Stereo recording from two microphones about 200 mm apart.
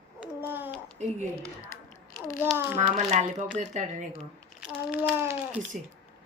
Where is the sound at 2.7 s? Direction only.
35° right (ahead or behind).